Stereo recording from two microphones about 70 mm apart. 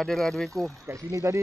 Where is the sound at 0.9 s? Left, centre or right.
Right.